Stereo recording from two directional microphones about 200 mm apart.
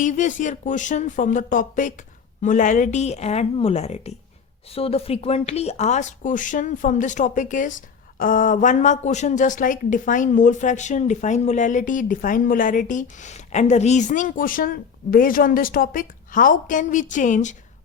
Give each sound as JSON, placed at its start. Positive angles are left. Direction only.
{"t": 0.0, "sound": "speech", "side_deg": 40}